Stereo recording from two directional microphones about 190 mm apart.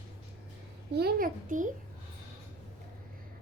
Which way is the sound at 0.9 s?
50° right (ahead or behind).